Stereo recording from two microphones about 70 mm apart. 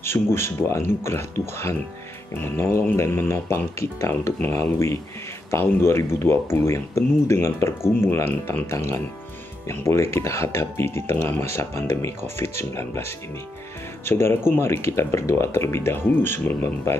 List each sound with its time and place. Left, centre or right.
0.0 s speech: left